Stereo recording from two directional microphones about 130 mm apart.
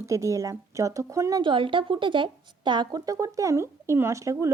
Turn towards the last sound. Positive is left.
turn(degrees=-25)  # may be behind; listen again after turning